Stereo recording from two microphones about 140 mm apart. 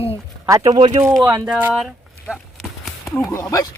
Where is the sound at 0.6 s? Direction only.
50° right (ahead or behind).